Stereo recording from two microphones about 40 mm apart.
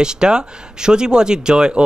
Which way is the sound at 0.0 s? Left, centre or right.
Centre.